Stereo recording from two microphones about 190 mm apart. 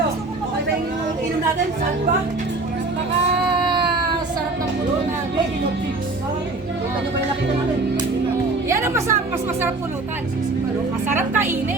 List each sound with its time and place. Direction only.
8.7 s music: 15° right (ahead or behind)
11.1 s speech: 10° right (ahead or behind)